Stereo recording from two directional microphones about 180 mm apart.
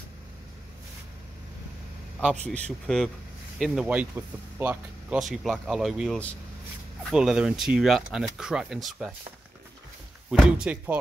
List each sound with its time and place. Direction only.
2.1 s speech: 5° left (ahead or behind)
10.3 s speech: 5° right (ahead or behind)